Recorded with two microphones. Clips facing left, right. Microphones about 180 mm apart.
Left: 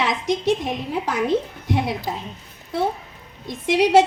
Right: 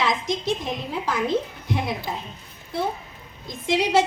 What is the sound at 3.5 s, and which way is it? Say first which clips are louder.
Speech: left 5 dB; 75° left (ahead or behind).